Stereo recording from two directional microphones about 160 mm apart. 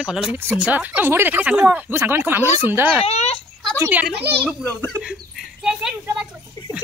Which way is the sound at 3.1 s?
40° left (ahead or behind).